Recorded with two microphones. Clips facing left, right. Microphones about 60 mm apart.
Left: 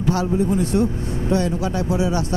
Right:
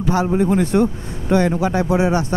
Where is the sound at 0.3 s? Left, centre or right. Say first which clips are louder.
Right 3 dB; right.